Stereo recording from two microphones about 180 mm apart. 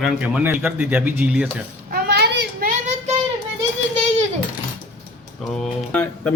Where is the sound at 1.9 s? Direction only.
65° right (ahead or behind).